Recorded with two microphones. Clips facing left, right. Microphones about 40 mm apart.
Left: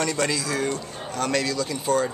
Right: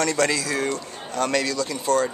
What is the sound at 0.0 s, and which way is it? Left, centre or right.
A man's voice, centre.